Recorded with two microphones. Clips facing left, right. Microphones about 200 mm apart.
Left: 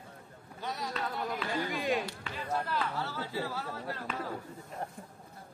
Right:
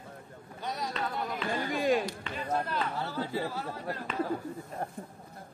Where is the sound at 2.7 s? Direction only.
15° right (ahead or behind).